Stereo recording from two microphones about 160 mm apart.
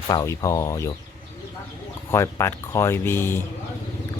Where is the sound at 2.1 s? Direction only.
15° left (ahead or behind).